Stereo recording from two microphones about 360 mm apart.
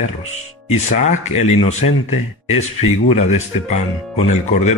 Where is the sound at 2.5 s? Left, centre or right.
Left.